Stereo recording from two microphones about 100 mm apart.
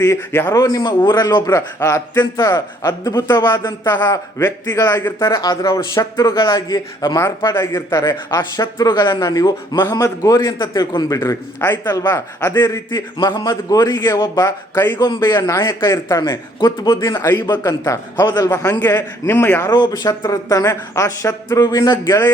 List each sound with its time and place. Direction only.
0.0 s a man's voice: 25° left (ahead or behind)
0.5 s speech: 35° left (ahead or behind)
1.5 s speech: 30° left (ahead or behind)
3.6 s a man's voice: 25° left (ahead or behind)
7.3 s speech: 25° left (ahead or behind)
11.2 s a man's voice: 25° left (ahead or behind)
12.5 s a man's voice: 45° left (ahead or behind)
13.4 s speech: 35° left (ahead or behind)
18.7 s a man's voice: 20° left (ahead or behind)
19.6 s a man's voice: 40° left (ahead or behind)